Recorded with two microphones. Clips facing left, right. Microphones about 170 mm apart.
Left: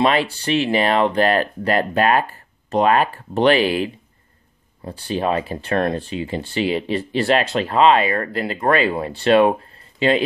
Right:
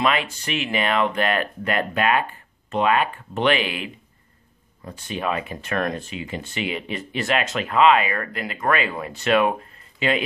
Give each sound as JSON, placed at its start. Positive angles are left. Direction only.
{"t": 0.0, "sound": "speech", "side_deg": 30}